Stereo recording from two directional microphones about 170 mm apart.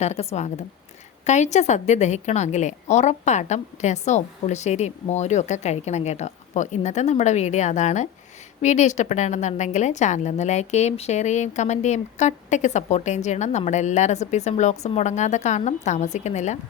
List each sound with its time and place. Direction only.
0.0 s a woman's voice: 40° left (ahead or behind)